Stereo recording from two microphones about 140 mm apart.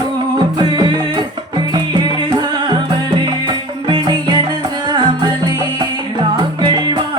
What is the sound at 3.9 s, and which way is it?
Music, 35° right (ahead or behind).